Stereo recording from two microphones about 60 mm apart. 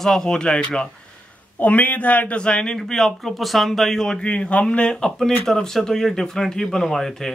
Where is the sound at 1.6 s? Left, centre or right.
Left; by 4.2 s centre.